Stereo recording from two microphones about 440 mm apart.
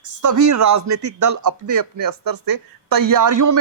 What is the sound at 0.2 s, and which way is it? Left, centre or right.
A man's voice, right.